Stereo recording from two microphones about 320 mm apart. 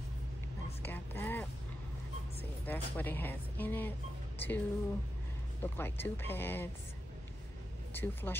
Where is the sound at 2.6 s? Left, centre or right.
Centre.